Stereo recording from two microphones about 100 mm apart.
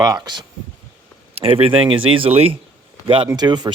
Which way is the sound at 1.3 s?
85° right.